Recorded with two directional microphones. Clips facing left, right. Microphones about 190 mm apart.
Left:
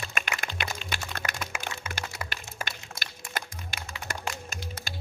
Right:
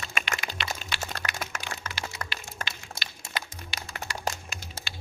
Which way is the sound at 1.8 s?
10° left (ahead or behind).